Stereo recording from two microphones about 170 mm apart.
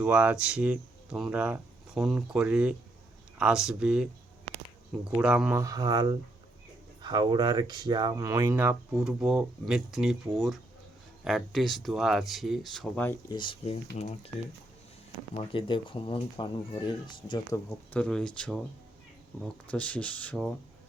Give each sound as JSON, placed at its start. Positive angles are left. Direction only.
{"t": 0.0, "sound": "speech", "side_deg": -10}
{"t": 5.1, "sound": "speech", "side_deg": -5}
{"t": 5.5, "sound": "speech", "side_deg": -20}
{"t": 13.3, "sound": "speech", "side_deg": 30}
{"t": 15.4, "sound": "speech", "side_deg": 30}
{"t": 17.9, "sound": "speech", "side_deg": 5}
{"t": 19.7, "sound": "speech", "side_deg": 10}